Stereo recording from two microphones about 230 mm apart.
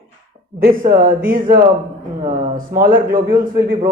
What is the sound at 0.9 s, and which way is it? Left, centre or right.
A man's voice, right.